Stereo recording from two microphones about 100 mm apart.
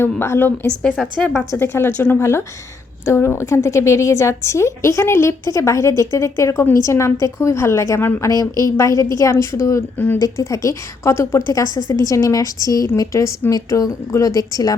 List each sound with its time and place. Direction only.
0.0 s a woman's voice: 25° left (ahead or behind)